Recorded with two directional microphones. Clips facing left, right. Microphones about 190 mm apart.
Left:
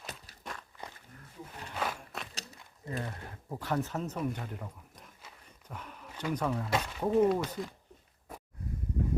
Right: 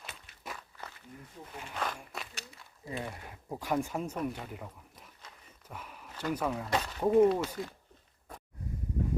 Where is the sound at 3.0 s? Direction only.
10° right (ahead or behind).